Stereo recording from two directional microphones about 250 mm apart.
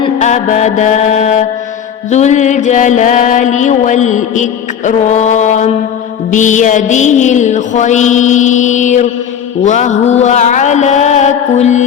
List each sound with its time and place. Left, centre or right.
0.0 s music: left